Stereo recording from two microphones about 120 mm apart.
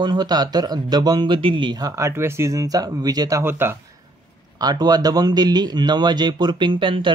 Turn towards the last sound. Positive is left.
turn(degrees=-45)  # may be behind; listen again after turning